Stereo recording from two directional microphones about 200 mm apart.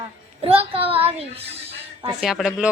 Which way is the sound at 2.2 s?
5° right (ahead or behind).